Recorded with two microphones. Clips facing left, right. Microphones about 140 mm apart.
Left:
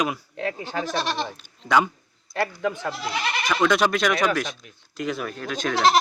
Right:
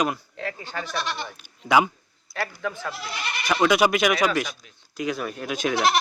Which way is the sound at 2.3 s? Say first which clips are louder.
Left 4 dB; 20° left (ahead or behind).